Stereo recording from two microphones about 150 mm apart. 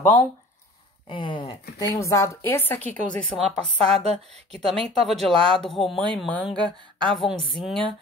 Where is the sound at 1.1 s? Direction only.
35° left (ahead or behind).